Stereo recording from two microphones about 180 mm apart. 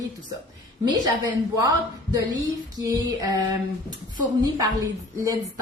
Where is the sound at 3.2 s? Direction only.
20° right (ahead or behind).